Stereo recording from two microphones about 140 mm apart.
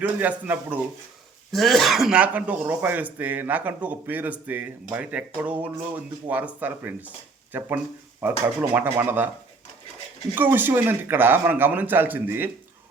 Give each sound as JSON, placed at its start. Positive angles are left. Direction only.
{"t": 0.2, "sound": "speech", "side_deg": -15}
{"t": 1.5, "sound": "speech", "side_deg": 0}
{"t": 8.7, "sound": "speech", "side_deg": -15}
{"t": 10.3, "sound": "speech", "side_deg": -15}